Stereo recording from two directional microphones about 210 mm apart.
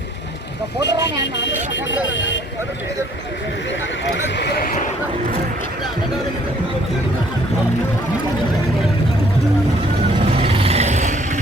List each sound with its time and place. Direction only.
0.8 s speech: 55° left (ahead or behind)
4.0 s a sound: 55° left (ahead or behind)
10.2 s vehicle: 25° right (ahead or behind)